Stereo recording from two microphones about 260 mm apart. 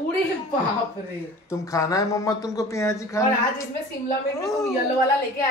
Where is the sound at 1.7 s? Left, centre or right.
Centre.